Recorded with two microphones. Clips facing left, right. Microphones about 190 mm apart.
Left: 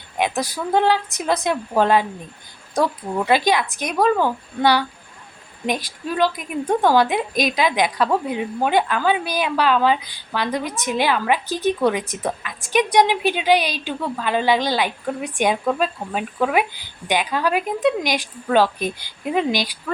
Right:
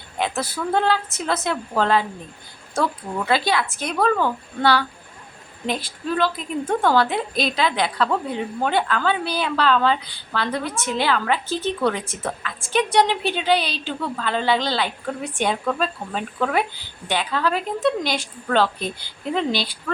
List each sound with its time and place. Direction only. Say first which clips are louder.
0.2 s a woman's voice: left 2 dB; 15° left (ahead or behind)